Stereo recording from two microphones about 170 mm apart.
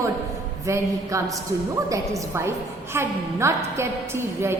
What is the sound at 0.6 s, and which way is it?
A woman's voice, 20° right (ahead or behind).